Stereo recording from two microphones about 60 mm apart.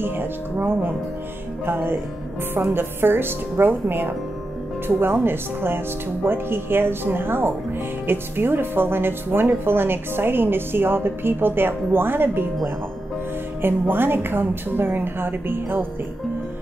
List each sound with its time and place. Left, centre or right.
0.0 s a woman's voice: right
13.6 s a woman's voice: right